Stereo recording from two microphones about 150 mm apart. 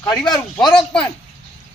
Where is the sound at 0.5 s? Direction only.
5° left (ahead or behind).